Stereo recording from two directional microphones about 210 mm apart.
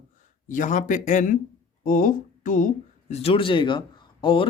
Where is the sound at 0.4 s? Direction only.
40° left (ahead or behind).